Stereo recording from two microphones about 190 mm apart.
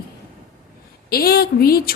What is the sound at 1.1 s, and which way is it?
Speech, 55° left (ahead or behind).